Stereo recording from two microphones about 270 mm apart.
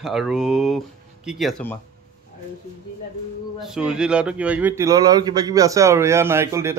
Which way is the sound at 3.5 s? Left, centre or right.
Centre.